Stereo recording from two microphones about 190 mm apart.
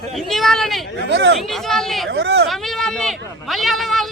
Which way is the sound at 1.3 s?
Centre (ahead or behind).